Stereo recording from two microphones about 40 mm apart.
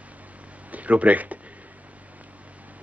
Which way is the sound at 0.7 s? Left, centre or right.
Right.